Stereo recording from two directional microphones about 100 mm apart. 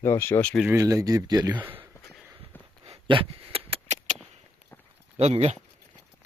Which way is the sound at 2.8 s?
65° right (ahead or behind).